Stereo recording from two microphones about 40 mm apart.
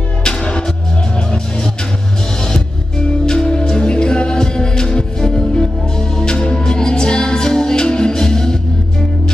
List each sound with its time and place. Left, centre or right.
0.2 s music: left
3.3 s music: centre